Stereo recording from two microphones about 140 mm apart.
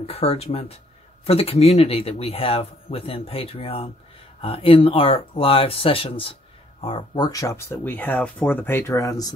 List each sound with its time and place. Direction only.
0.0 s speech: 45° left (ahead or behind)
7.2 s speech: 25° left (ahead or behind)